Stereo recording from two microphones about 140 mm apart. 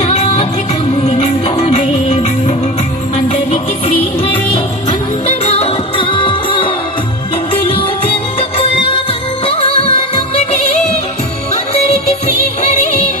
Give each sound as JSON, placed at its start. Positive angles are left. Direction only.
{"t": 0.0, "sound": "music", "side_deg": 55}
{"t": 5.2, "sound": "music", "side_deg": 50}